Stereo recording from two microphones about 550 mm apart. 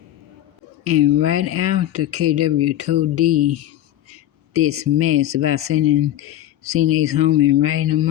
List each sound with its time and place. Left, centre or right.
0.9 s speech: right